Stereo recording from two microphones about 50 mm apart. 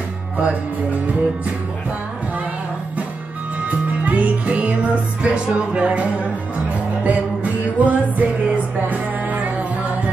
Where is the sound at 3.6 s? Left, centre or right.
Right.